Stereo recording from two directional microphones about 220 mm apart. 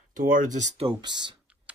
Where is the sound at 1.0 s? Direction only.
20° right (ahead or behind).